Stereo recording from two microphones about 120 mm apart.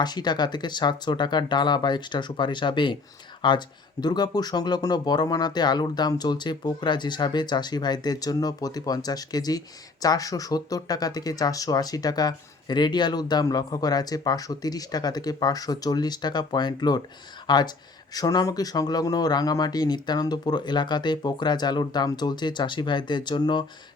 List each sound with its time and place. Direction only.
0.0 s speech: 35° left (ahead or behind)